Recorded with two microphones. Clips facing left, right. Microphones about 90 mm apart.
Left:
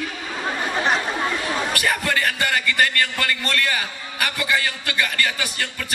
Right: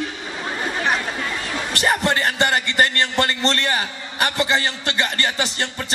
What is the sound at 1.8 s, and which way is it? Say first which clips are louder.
A man's voice: right 7 dB; 25° right (ahead or behind).